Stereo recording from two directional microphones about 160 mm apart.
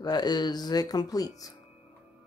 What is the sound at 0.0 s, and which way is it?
Speech, 25° left (ahead or behind).